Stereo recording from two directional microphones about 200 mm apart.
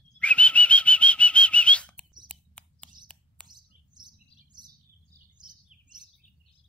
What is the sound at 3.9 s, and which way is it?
Chirp, 20° right (ahead or behind).